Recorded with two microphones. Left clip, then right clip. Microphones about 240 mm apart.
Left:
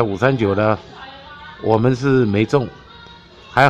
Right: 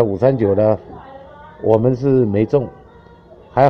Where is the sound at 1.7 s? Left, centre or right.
Left.